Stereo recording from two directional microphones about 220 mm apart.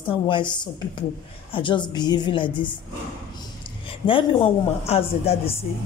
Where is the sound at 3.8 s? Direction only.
25° left (ahead or behind).